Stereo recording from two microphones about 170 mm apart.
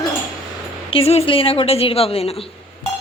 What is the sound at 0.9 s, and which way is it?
A woman's voice, 35° left (ahead or behind).